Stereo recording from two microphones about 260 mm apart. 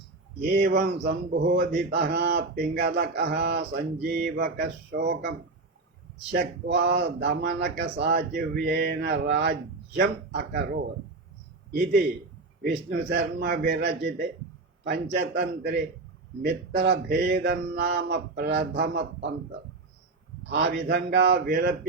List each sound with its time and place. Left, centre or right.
0.5 s speech: right
6.3 s speech: right
12.6 s speech: right
20.5 s speech: right